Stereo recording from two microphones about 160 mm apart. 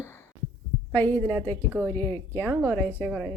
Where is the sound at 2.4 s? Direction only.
15° right (ahead or behind).